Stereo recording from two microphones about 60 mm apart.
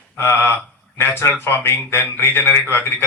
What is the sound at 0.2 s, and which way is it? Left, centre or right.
A man's voice, left.